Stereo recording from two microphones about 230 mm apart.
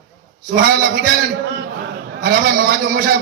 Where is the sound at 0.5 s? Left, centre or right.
Right.